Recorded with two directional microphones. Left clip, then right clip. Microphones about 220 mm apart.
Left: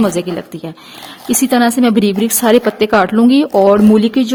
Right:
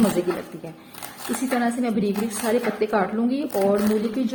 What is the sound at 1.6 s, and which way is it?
A woman's voice, 55° left (ahead or behind).